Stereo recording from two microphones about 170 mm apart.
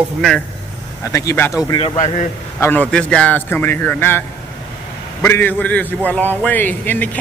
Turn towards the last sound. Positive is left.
turn(degrees=10)  # may be behind; listen again after turning